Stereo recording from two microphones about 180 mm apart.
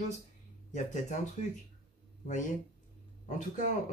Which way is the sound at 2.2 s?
45° left (ahead or behind).